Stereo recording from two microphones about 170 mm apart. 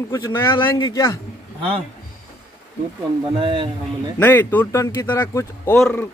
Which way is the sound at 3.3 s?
30° right (ahead or behind).